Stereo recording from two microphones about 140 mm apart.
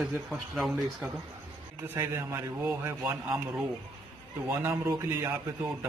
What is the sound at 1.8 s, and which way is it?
A man's voice, 20° right (ahead or behind).